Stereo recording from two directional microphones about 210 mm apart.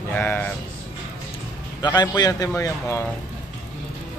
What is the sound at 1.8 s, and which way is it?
A man's voice, 20° left (ahead or behind).